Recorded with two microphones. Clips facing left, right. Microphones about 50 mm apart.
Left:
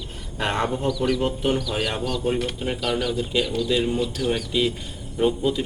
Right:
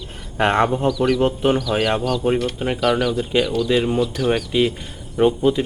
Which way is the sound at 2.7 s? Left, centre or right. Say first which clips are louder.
Right 8 dB; centre.